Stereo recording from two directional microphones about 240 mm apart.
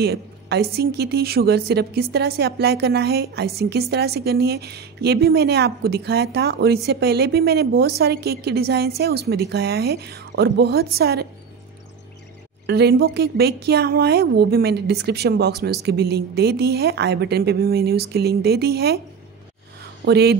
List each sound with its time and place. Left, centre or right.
0.0 s a woman's voice: right
12.6 s a woman's voice: right
20.1 s a woman's voice: right